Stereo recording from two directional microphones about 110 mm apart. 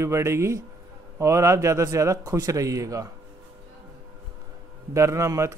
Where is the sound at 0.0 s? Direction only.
25° right (ahead or behind).